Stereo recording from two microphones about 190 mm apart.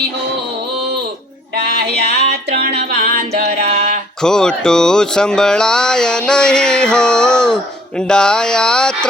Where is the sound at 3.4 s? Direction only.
55° right (ahead or behind).